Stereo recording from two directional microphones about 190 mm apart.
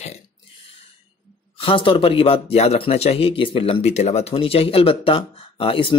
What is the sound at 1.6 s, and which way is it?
Speech, 30° left (ahead or behind).